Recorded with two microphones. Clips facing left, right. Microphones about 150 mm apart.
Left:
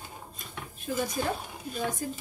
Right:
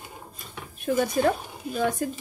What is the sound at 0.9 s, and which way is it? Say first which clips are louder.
Speech: right 7 dB; 65° right (ahead or behind).